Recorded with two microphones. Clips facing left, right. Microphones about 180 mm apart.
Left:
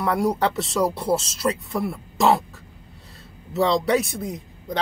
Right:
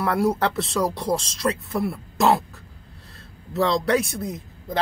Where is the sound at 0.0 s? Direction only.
Centre (ahead or behind).